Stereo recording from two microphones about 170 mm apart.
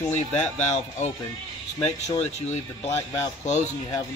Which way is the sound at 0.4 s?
40° left (ahead or behind).